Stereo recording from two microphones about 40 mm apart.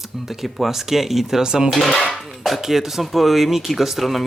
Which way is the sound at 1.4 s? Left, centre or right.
Centre.